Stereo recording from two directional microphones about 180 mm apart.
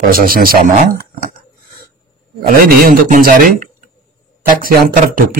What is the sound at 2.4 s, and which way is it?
A man's voice, 55° right (ahead or behind).